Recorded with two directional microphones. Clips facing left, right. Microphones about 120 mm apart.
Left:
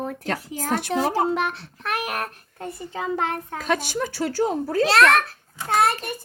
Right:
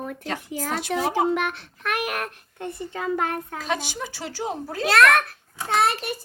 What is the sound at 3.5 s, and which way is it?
Speech, 50° left (ahead or behind).